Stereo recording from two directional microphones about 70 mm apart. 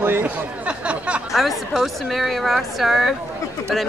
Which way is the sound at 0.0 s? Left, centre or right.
Right.